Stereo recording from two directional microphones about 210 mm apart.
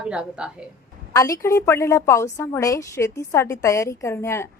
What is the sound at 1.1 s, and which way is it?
A woman's voice, 15° left (ahead or behind).